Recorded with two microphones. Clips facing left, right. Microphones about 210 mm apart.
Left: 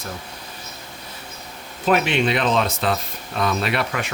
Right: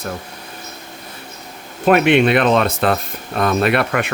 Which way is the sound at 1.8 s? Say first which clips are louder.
Right 7 dB; 60° right (ahead or behind).